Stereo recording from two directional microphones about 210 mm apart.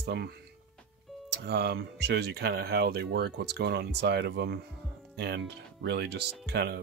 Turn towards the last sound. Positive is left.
turn(degrees=-50)  # may be behind; listen again after turning